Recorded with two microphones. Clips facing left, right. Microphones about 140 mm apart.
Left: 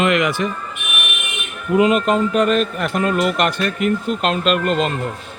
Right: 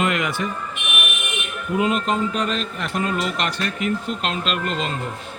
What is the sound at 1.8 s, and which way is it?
A man's voice, 70° left (ahead or behind).